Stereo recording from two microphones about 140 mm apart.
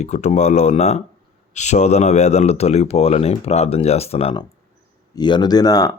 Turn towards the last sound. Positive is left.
turn(degrees=25)  # may be behind; listen again after turning